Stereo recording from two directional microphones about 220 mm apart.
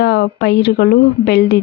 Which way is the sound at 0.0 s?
50° left (ahead or behind).